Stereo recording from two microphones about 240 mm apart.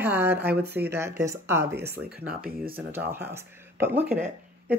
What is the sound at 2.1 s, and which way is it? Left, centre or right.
Speech, right.